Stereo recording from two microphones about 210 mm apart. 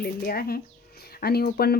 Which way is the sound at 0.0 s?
45° left (ahead or behind).